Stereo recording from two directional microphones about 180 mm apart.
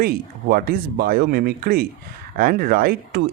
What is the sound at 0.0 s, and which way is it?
Speech, 55° right (ahead or behind).